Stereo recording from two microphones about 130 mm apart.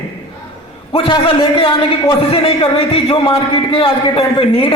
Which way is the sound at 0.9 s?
45° left (ahead or behind).